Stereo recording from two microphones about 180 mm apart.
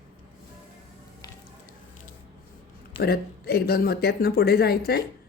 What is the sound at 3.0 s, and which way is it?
Speech, 60° left (ahead or behind).